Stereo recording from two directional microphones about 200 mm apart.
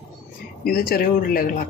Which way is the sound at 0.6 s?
50° left (ahead or behind).